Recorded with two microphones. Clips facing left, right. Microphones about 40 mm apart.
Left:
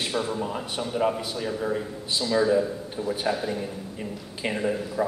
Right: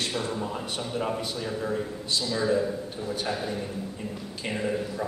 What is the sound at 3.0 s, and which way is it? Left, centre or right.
A man's voice, centre.